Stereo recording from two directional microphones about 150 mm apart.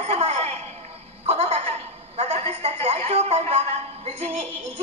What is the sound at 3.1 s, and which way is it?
A woman's voice, 45° right (ahead or behind).